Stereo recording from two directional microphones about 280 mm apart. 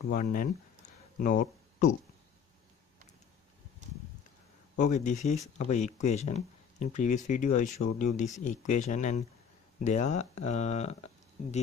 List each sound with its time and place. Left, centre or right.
0.1 s speech: left
4.7 s speech: left